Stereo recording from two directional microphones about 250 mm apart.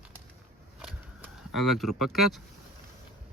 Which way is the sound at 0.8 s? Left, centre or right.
Centre.